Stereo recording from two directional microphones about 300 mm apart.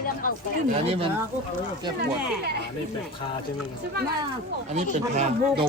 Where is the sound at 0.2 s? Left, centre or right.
Left.